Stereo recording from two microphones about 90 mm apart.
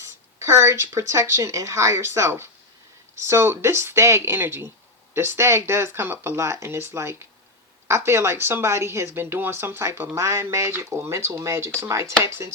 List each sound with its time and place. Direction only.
0.0 s speech: 35° right (ahead or behind)